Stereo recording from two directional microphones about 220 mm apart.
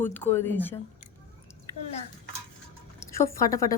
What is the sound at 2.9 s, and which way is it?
Speech, 15° left (ahead or behind).